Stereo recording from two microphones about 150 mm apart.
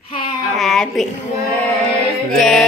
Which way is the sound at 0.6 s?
Centre (ahead or behind).